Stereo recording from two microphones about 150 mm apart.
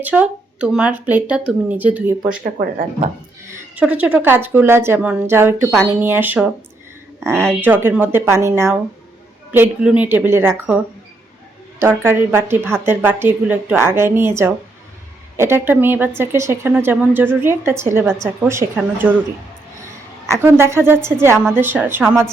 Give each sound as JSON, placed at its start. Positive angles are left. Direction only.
{"t": 0.0, "sound": "a woman's voice", "side_deg": -10}
{"t": 2.4, "sound": "speech", "side_deg": -70}
{"t": 3.5, "sound": "a woman's voice", "side_deg": -10}
{"t": 11.8, "sound": "a woman's voice", "side_deg": -15}
{"t": 20.4, "sound": "a woman's voice", "side_deg": -15}